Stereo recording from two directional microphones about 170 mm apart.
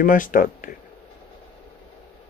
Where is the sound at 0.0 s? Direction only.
55° left (ahead or behind).